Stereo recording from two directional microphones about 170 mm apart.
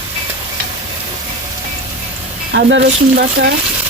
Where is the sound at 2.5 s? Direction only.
90° right.